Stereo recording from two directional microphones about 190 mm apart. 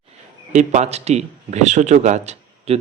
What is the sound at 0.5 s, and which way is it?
Speech, 40° right (ahead or behind).